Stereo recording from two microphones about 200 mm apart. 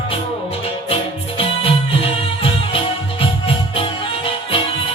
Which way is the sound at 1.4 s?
25° left (ahead or behind).